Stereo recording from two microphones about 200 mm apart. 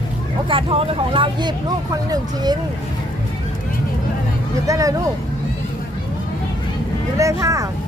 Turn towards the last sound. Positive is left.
turn(degrees=-15)  # may be behind; listen again after turning